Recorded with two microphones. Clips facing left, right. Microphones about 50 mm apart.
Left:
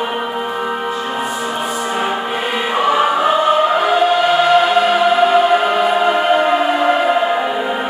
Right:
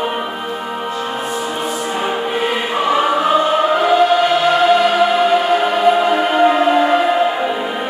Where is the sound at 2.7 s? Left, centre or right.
Centre.